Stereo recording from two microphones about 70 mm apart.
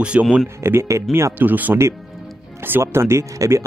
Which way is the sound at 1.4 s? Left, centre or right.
Right.